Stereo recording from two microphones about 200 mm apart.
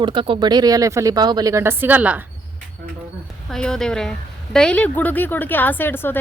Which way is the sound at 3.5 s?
5° left (ahead or behind).